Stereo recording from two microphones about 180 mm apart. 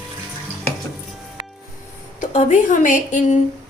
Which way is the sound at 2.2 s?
45° left (ahead or behind).